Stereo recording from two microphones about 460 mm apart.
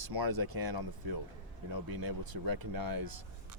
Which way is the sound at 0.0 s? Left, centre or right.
Right.